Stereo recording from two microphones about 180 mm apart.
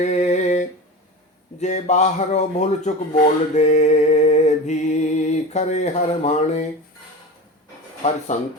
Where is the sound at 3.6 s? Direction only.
40° left (ahead or behind).